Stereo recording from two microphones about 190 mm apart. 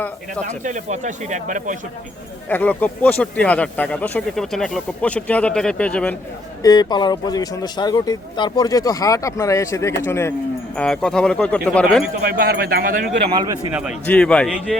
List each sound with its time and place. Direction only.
0.4 s speech: 40° right (ahead or behind)
2.5 s speech: 10° left (ahead or behind)
6.6 s speech: 20° left (ahead or behind); by 12.0 s 5° left (ahead or behind)
12.2 s speech: 55° right (ahead or behind)
13.3 s speech: 25° right (ahead or behind)
13.7 s a man's voice: 5° right (ahead or behind)
14.0 s speech: 5° left (ahead or behind)